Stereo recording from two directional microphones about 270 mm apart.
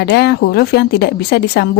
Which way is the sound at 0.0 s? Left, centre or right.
Left.